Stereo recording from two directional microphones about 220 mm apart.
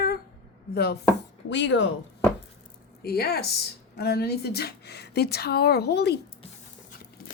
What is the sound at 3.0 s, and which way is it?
A woman's voice, 45° left (ahead or behind).